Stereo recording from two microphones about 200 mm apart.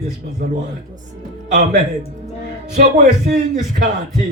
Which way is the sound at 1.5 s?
40° right (ahead or behind).